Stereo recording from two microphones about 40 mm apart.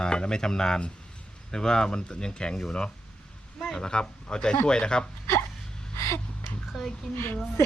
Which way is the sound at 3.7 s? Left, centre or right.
Centre.